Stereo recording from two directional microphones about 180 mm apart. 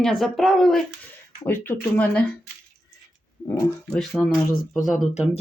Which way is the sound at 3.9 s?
Centre (ahead or behind).